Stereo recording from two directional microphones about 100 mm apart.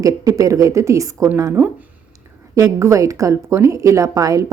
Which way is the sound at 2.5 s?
30° right (ahead or behind).